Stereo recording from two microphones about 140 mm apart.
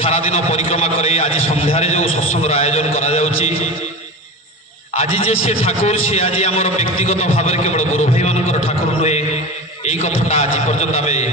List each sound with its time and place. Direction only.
0.0 s a man's voice: 45° left (ahead or behind)
4.9 s a man's voice: 45° left (ahead or behind)